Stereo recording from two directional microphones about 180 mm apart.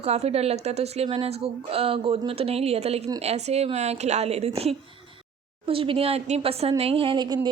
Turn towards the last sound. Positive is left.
turn(degrees=-25)  # may be behind; listen again after turning